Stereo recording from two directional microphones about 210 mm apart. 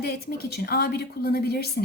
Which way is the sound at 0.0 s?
45° left (ahead or behind).